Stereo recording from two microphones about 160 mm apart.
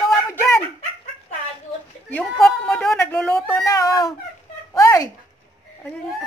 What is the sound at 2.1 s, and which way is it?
Speech, 5° left (ahead or behind).